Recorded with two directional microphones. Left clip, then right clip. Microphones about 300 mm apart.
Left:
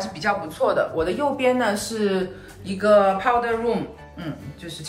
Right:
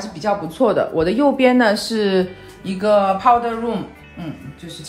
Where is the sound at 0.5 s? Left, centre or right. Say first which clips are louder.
Right 6 dB; right.